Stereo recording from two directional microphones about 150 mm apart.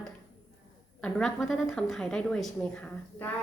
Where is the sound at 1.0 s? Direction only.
5° left (ahead or behind).